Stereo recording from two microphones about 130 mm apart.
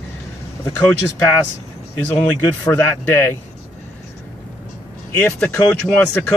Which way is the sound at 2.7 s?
15° left (ahead or behind).